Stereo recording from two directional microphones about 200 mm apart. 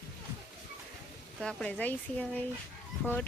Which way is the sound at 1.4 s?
5° left (ahead or behind).